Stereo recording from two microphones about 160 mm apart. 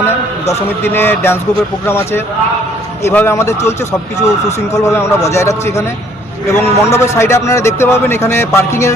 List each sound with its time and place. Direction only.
0.0 s a man's voice: 15° left (ahead or behind)